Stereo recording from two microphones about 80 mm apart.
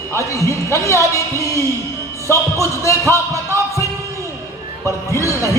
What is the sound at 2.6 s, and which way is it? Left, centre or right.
Speech, left.